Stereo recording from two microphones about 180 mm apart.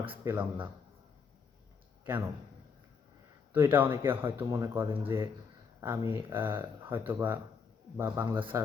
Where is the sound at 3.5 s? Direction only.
10° right (ahead or behind).